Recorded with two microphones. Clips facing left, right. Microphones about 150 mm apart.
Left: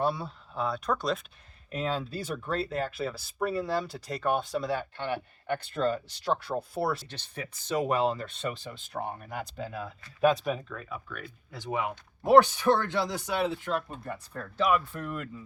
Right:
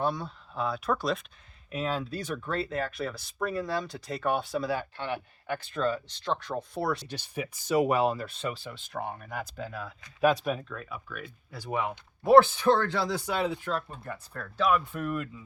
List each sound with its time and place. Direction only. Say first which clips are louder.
0.0 s speech: left 1 dB; 5° left (ahead or behind)
7.1 s speech: right 5 dB; 10° right (ahead or behind)
11.5 s speech: even; 15° left (ahead or behind)
14.9 s speech: right 4 dB; 10° right (ahead or behind)